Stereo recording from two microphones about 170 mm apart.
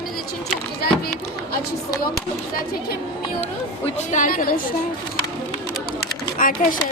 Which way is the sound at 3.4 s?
45° left (ahead or behind).